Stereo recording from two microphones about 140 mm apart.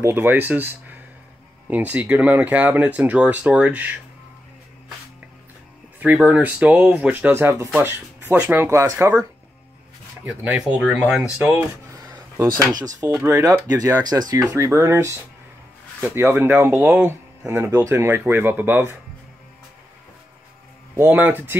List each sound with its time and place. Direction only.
0.0 s speech: 15° right (ahead or behind)
5.9 s speech: 10° right (ahead or behind)
10.2 s speech: 5° right (ahead or behind)
12.5 s speech: 25° right (ahead or behind)
20.9 s speech: 15° right (ahead or behind)